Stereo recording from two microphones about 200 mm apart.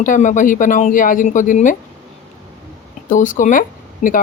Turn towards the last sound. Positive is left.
turn(degrees=40)  # may be behind; listen again after turning